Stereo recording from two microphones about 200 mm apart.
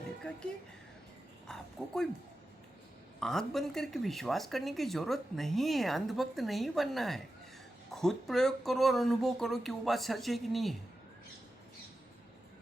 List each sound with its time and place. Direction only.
0.2 s speech: 5° left (ahead or behind)
3.2 s speech: centre (ahead or behind)